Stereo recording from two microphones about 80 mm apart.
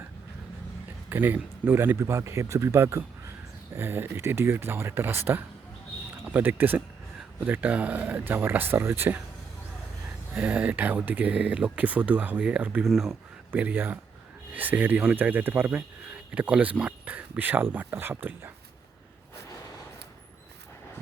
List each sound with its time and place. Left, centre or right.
1.1 s speech: right
10.3 s speech: centre
12.8 s speech: centre
13.5 s speech: right